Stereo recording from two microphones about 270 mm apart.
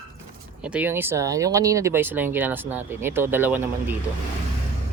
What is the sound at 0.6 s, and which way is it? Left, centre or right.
Speech, centre.